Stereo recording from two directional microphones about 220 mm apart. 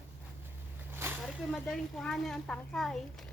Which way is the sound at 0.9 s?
10° right (ahead or behind).